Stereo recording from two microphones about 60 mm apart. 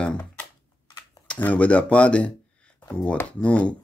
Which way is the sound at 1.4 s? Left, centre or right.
Left.